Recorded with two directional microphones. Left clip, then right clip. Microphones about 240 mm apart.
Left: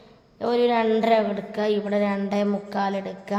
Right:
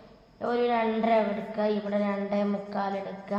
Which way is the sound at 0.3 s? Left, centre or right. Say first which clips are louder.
Left 5 dB; left.